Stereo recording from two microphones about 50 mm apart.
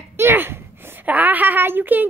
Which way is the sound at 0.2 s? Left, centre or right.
Right.